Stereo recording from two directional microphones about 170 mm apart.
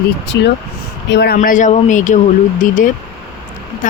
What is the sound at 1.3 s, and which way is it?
Speech, 50° left (ahead or behind).